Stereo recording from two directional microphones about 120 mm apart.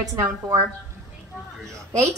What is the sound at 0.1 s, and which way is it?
Speech, 35° right (ahead or behind).